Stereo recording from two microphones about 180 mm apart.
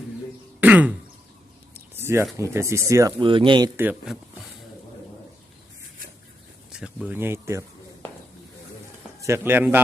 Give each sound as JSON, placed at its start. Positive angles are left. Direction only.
{"t": 0.6, "sound": "throat clearing", "side_deg": -10}
{"t": 2.0, "sound": "a sound", "side_deg": -15}
{"t": 2.4, "sound": "speech", "side_deg": -15}
{"t": 3.2, "sound": "speech", "side_deg": -30}
{"t": 3.8, "sound": "speech", "side_deg": -5}
{"t": 6.7, "sound": "speech", "side_deg": -5}
{"t": 9.2, "sound": "speech", "side_deg": -15}